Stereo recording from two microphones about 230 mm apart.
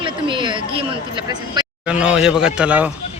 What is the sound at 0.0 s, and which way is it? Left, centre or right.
Speech, right.